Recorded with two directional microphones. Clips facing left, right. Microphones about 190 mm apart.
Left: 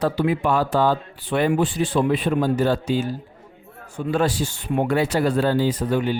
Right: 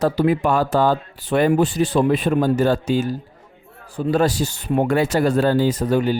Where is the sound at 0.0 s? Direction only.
40° right (ahead or behind).